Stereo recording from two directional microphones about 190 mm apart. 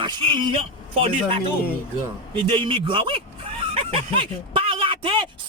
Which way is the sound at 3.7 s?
30° right (ahead or behind).